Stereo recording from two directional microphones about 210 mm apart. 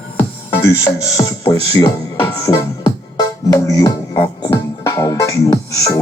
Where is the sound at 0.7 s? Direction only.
20° left (ahead or behind).